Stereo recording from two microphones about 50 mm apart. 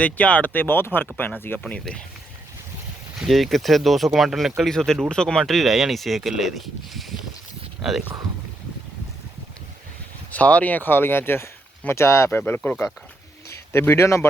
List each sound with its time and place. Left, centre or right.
0.0 s speech: left
3.2 s speech: centre
4.7 s speech: centre
5.5 s speech: centre
10.3 s speech: left
11.9 s speech: left
12.3 s speech: left
13.7 s speech: left